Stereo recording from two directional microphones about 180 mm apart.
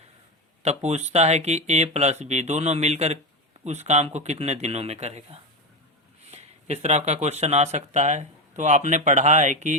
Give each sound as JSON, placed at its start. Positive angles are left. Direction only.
{"t": 0.6, "sound": "speech", "side_deg": -40}